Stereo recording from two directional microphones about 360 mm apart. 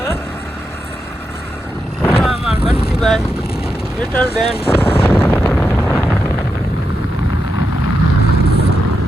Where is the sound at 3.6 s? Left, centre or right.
Centre.